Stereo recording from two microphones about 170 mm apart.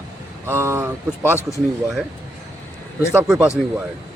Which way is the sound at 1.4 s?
20° left (ahead or behind).